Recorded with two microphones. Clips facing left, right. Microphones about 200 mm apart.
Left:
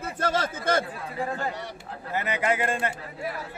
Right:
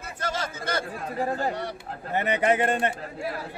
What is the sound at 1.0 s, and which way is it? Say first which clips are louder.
Speech: right 3 dB; 45° right (ahead or behind).